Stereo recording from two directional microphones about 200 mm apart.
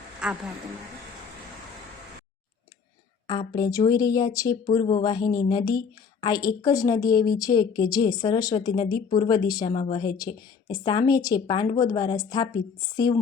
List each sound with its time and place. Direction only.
0.2 s speech: 5° right (ahead or behind)
3.2 s a woman's voice: 20° left (ahead or behind)